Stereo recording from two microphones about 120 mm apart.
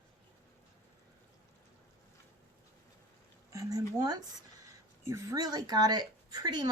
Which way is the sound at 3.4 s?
30° right (ahead or behind).